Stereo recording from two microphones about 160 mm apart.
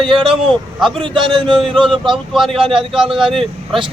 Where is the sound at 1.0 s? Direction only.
30° right (ahead or behind).